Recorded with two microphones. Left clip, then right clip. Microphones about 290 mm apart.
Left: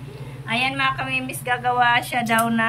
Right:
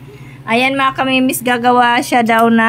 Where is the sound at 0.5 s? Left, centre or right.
Centre.